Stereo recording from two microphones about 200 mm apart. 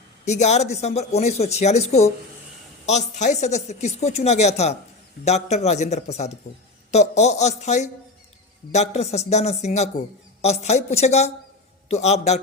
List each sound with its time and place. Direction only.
0.3 s speech: 35° left (ahead or behind)